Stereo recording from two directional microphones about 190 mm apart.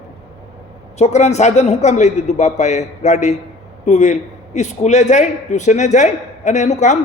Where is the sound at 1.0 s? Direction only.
35° left (ahead or behind).